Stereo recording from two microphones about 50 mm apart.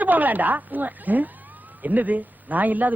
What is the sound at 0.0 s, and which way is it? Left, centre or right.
A man's voice, right.